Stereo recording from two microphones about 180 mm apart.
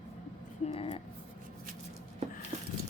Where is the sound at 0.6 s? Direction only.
30° left (ahead or behind).